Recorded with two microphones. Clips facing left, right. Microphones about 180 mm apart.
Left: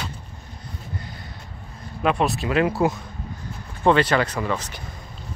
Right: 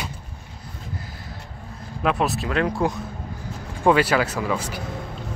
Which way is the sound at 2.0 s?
Centre (ahead or behind).